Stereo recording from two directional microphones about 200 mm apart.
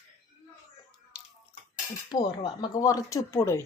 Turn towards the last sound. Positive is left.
turn(degrees=15)  # may be behind; listen again after turning